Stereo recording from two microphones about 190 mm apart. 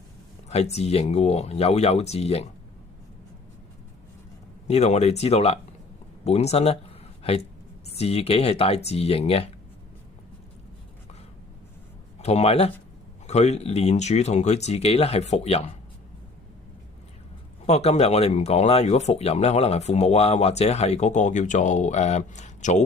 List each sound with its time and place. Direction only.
0.4 s speech: 35° left (ahead or behind)
4.7 s speech: 35° left (ahead or behind)
12.2 s speech: 35° left (ahead or behind)
17.7 s speech: 35° left (ahead or behind)